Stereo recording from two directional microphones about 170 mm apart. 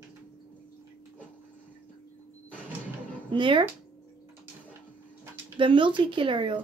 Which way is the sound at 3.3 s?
30° right (ahead or behind).